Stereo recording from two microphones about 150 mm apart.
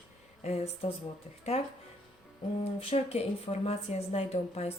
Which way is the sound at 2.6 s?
40° left (ahead or behind).